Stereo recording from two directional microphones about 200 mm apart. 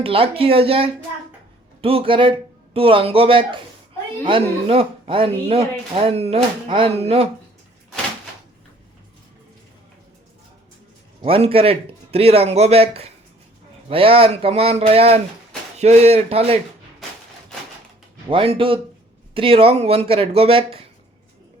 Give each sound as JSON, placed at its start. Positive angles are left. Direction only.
{"t": 0.0, "sound": "speech", "side_deg": -25}
{"t": 11.2, "sound": "a man's voice", "side_deg": -30}
{"t": 18.3, "sound": "speech", "side_deg": -25}